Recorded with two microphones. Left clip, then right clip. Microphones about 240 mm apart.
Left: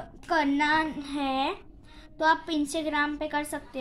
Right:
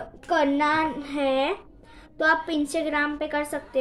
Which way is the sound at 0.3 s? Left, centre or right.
Left.